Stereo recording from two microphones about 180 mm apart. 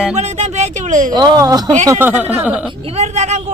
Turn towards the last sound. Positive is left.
turn(degrees=-40)  # may be behind; listen again after turning